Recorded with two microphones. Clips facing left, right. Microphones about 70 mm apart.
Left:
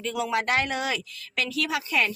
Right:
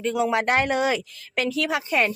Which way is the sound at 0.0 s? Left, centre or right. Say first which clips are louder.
Right 5 dB; right.